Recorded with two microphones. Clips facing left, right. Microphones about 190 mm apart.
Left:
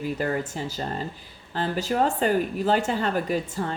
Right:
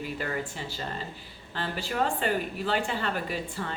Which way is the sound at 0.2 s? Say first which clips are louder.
Left 6 dB; 40° left (ahead or behind).